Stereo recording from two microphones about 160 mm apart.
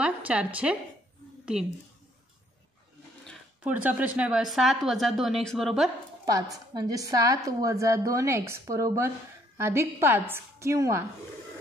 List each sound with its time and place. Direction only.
0.0 s a woman's voice: 10° right (ahead or behind)
3.6 s speech: 10° right (ahead or behind)
6.5 s a woman's voice: 25° right (ahead or behind)